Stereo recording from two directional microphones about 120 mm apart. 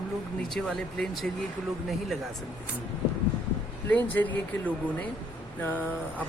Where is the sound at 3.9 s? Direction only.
15° left (ahead or behind).